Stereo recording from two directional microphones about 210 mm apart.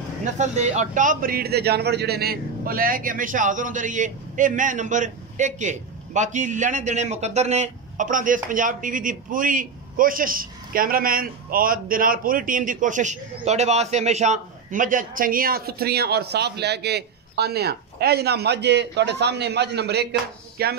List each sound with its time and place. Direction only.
0.2 s a man's voice: 35° right (ahead or behind); by 20.7 s 50° right (ahead or behind)